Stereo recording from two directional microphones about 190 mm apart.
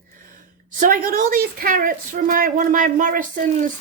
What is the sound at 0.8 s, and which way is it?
Speech, 45° right (ahead or behind).